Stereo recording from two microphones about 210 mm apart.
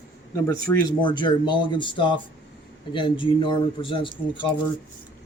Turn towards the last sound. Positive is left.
turn(degrees=25)  # may be behind; listen again after turning